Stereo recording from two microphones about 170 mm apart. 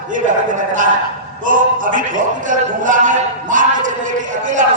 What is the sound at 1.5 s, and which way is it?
A man's voice, 50° right (ahead or behind).